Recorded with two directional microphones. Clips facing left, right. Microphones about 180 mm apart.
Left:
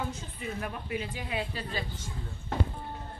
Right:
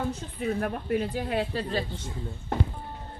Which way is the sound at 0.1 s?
50° right (ahead or behind).